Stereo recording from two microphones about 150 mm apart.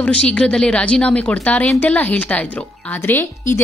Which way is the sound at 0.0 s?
10° left (ahead or behind).